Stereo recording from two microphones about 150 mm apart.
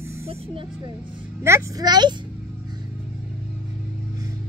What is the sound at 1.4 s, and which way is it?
Speech, 20° right (ahead or behind).